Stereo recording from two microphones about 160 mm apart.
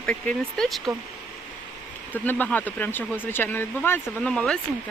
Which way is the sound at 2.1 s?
10° left (ahead or behind).